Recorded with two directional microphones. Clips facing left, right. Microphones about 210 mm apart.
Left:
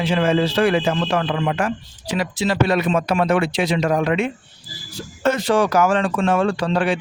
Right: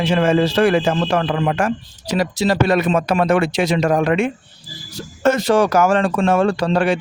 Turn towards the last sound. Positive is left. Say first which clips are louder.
# right 3 dB
turn(degrees=-45)  # may be behind; listen again after turning